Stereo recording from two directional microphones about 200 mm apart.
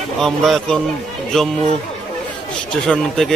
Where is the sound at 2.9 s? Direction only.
Centre (ahead or behind).